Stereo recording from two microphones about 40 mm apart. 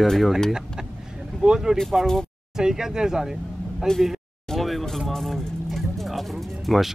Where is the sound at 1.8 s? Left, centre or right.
Centre.